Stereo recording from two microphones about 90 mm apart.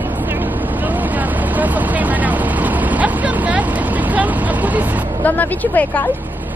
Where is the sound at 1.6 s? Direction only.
20° right (ahead or behind).